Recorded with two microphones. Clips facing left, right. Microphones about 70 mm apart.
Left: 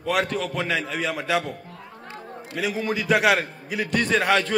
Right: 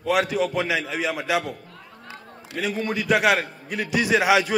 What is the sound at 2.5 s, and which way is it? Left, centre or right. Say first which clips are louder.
A man's voice: even; centre.